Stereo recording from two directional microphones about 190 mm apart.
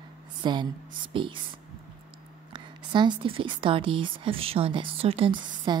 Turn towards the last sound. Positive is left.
turn(degrees=-30)  # may be behind; listen again after turning